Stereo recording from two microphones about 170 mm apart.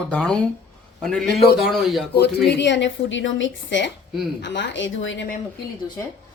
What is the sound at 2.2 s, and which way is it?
Speech, 85° left.